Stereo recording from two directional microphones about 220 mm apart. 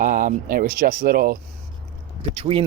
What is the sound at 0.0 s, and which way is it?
Speech, 35° right (ahead or behind).